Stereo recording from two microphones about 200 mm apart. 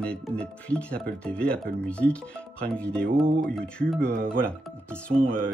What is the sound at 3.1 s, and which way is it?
Speech, 45° right (ahead or behind).